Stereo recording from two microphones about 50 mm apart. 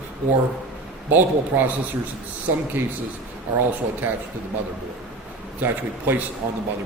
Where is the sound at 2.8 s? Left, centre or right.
Right.